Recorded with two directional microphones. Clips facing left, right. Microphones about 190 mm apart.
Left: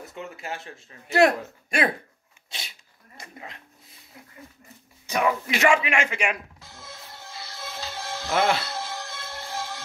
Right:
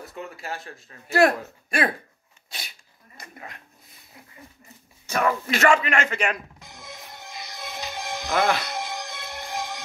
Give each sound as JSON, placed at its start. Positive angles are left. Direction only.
{"t": 0.0, "sound": "speech", "side_deg": 20}
{"t": 3.2, "sound": "speech", "side_deg": 20}
{"t": 5.0, "sound": "a man's voice", "side_deg": 15}
{"t": 6.6, "sound": "music", "side_deg": -15}